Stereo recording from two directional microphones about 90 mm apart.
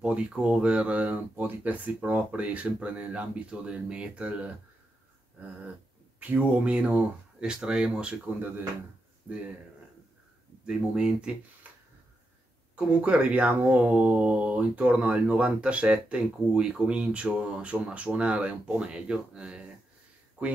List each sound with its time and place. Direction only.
0.0 s speech: 10° right (ahead or behind)
5.4 s a sound: 20° right (ahead or behind)
6.1 s speech: 15° right (ahead or behind)
10.6 s speech: 10° right (ahead or behind)
11.6 s a sound: 20° right (ahead or behind)
12.7 s speech: 15° right (ahead or behind)